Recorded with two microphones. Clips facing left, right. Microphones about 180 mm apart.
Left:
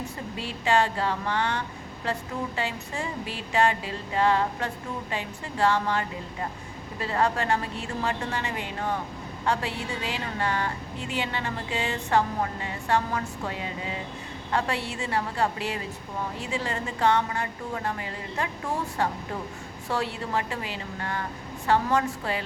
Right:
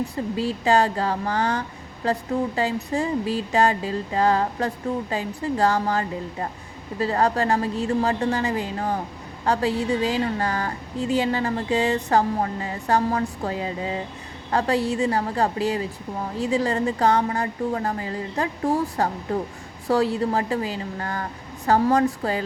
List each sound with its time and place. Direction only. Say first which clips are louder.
0.4 s a woman's voice: right 3 dB; 40° right (ahead or behind)